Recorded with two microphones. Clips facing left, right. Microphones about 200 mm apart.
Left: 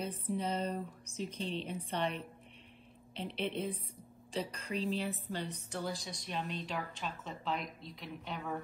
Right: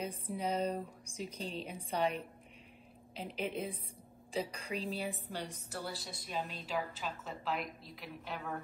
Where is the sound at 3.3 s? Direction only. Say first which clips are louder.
Left 1 dB; 10° right (ahead or behind).